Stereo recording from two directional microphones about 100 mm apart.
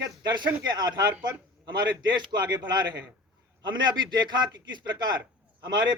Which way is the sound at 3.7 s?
45° right (ahead or behind).